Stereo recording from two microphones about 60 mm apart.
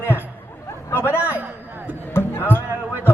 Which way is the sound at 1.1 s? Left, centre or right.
Right.